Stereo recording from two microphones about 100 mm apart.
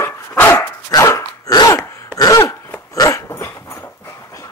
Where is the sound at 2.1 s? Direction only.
35° left (ahead or behind).